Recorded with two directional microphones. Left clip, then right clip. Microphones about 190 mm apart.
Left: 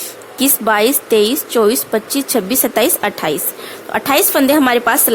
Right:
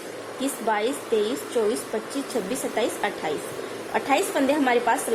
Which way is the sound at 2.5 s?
60° left (ahead or behind).